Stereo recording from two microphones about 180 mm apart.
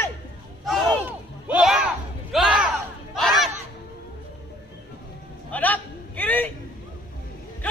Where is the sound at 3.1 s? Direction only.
Centre (ahead or behind).